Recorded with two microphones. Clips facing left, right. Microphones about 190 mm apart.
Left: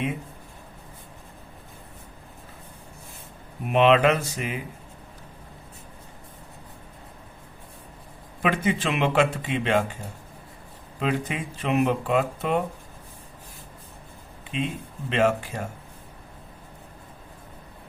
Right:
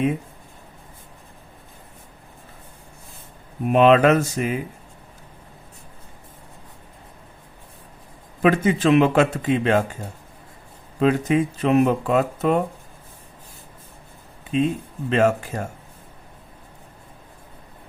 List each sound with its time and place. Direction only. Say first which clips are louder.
3.7 s speech: right 4 dB; 45° right (ahead or behind)
8.4 s speech: right 6 dB; 40° right (ahead or behind)
11.0 s speech: right 9 dB; 40° right (ahead or behind)
14.5 s speech: right 8 dB; 40° right (ahead or behind)